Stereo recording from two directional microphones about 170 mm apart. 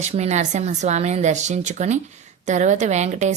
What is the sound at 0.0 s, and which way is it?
A woman's voice, 40° right (ahead or behind).